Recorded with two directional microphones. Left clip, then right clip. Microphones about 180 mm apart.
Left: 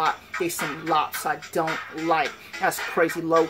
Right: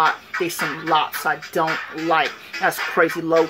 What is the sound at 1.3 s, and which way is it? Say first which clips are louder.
Speech: right 5 dB; centre (ahead or behind).